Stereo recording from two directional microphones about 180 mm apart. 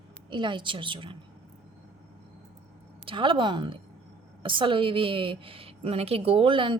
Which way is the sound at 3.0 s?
30° right (ahead or behind).